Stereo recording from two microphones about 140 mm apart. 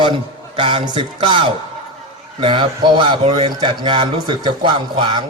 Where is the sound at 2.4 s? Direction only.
35° right (ahead or behind).